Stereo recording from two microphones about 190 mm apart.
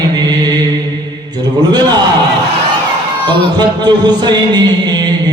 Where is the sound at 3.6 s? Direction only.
20° right (ahead or behind).